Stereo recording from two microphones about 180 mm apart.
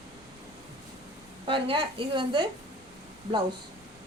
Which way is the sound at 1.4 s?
30° right (ahead or behind).